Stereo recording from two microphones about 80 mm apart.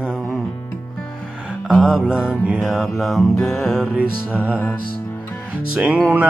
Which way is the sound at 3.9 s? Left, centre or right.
Centre.